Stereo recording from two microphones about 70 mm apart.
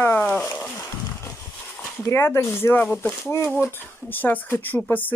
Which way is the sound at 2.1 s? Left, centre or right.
Left.